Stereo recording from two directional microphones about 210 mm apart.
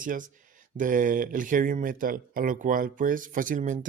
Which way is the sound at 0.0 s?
40° right (ahead or behind).